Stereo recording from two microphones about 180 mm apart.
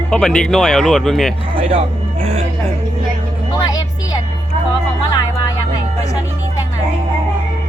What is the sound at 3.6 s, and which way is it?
Music, 20° left (ahead or behind).